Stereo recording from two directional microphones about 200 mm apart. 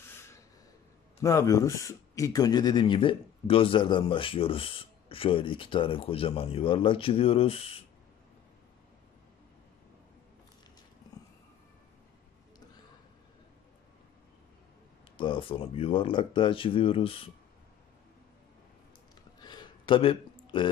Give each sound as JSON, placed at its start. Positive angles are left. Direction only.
{"t": 1.2, "sound": "a man's voice", "side_deg": 15}
{"t": 15.1, "sound": "a man's voice", "side_deg": 25}
{"t": 19.4, "sound": "a sound", "side_deg": 20}